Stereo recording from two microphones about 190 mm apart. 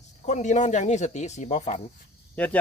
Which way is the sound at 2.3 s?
10° left (ahead or behind).